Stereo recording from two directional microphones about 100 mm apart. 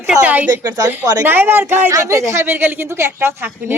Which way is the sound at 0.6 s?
40° right (ahead or behind).